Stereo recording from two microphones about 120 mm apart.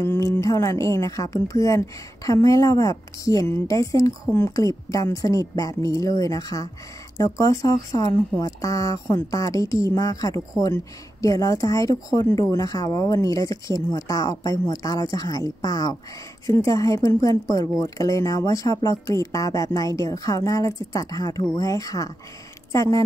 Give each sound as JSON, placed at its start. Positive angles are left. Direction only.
{"t": 0.0, "sound": "speech", "side_deg": 25}